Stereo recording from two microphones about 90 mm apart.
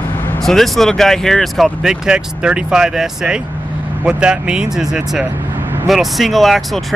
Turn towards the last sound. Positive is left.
turn(degrees=0)  # may be behind; listen again after turning